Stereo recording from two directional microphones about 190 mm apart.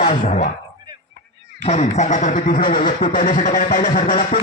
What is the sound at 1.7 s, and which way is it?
Speech, 35° left (ahead or behind).